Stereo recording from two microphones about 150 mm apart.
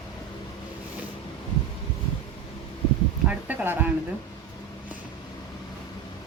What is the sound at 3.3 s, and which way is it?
Speech, 10° right (ahead or behind).